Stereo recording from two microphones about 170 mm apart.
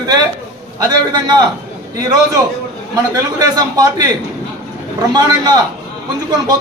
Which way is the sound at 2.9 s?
20° right (ahead or behind).